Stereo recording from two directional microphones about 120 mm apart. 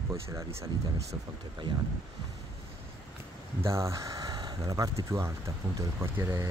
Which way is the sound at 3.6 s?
25° right (ahead or behind).